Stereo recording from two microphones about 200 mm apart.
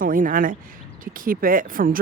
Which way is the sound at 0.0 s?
45° right (ahead or behind).